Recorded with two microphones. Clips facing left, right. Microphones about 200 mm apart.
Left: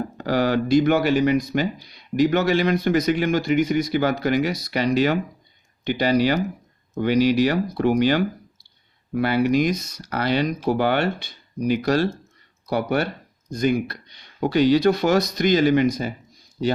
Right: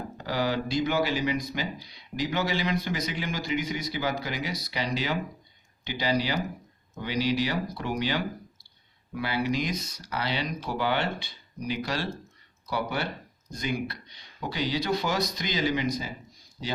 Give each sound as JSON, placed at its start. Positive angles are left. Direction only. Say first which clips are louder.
{"t": 0.3, "sound": "speech", "louder": "left 9 dB", "side_deg": 60}
{"t": 11.8, "sound": "speech", "louder": "left 10 dB", "side_deg": 45}
{"t": 14.5, "sound": "speech", "louder": "left 11 dB", "side_deg": 60}